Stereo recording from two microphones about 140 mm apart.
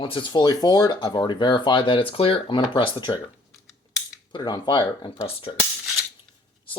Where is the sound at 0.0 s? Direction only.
35° left (ahead or behind).